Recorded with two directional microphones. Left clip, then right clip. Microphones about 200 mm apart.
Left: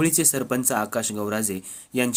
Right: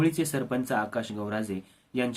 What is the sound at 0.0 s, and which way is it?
Speech, 45° left (ahead or behind).